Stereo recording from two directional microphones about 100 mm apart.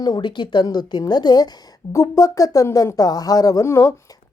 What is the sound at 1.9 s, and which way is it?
Speech, 35° left (ahead or behind).